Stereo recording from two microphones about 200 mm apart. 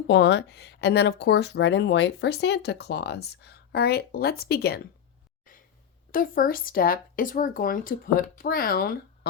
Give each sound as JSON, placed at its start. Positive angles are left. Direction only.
{"t": 0.1, "sound": "speech", "side_deg": 65}
{"t": 5.5, "sound": "a sound", "side_deg": 40}
{"t": 6.1, "sound": "speech", "side_deg": 45}